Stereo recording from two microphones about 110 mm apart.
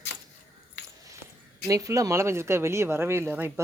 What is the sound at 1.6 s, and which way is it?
Speech, 30° right (ahead or behind).